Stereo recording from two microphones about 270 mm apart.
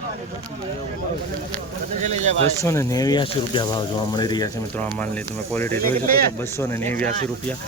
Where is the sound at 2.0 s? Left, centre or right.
Right.